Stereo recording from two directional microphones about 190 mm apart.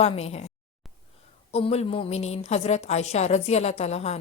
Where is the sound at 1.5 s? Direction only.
30° left (ahead or behind).